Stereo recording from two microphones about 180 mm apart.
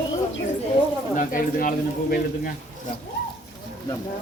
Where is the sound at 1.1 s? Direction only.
45° left (ahead or behind).